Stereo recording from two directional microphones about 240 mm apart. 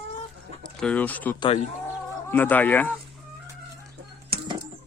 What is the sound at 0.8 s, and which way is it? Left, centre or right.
Speech, centre.